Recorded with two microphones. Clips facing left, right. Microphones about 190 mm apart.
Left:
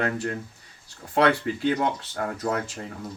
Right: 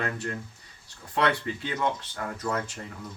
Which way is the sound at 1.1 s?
40° left (ahead or behind).